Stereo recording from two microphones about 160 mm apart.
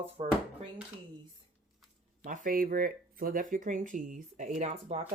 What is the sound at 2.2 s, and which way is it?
Speech, 60° right (ahead or behind).